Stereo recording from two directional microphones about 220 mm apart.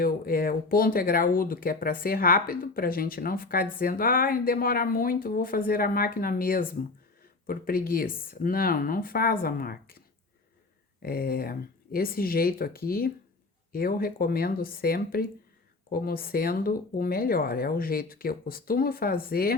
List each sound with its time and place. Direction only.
0.0 s speech: 40° left (ahead or behind)
11.0 s speech: 45° left (ahead or behind)